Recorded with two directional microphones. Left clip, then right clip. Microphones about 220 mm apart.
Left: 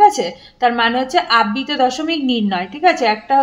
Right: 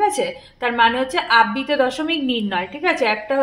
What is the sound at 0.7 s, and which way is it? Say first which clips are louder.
Speech: left 1 dB; 50° left (ahead or behind).